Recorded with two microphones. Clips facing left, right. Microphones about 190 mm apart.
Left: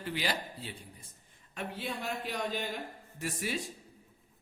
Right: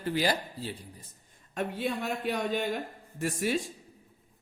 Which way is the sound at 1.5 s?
50° right (ahead or behind).